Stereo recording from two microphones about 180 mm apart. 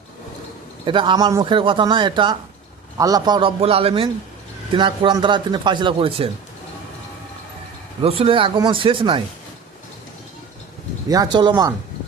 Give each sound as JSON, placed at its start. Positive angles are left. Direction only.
{"t": 0.9, "sound": "a man's voice", "side_deg": -25}
{"t": 8.0, "sound": "a man's voice", "side_deg": -30}
{"t": 11.1, "sound": "a man's voice", "side_deg": -20}